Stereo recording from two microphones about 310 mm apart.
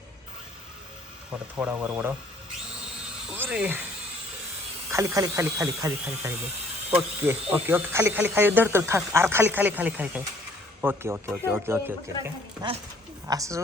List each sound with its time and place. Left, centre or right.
1.5 s speech: centre
3.3 s speech: centre
4.9 s speech: centre